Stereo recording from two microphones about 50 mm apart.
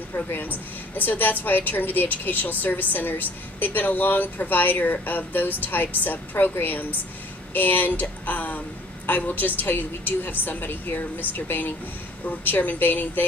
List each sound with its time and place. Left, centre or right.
0.1 s a woman's voice: left